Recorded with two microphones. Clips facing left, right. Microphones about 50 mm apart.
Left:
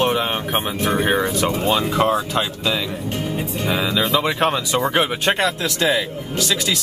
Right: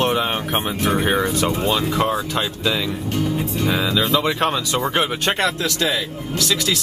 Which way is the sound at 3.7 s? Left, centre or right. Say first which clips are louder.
Even; centre.